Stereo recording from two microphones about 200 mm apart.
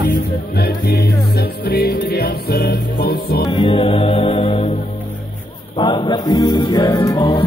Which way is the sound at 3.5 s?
30° left (ahead or behind).